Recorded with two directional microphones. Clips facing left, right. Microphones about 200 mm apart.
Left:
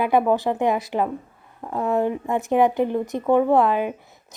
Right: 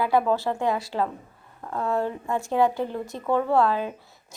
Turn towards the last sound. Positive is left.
turn(degrees=20)  # may be behind; listen again after turning